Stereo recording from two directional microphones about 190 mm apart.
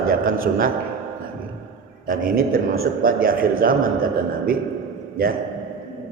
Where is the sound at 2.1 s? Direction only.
50° right (ahead or behind).